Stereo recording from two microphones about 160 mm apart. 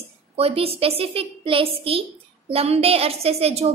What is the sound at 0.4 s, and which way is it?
A woman's voice, 40° right (ahead or behind).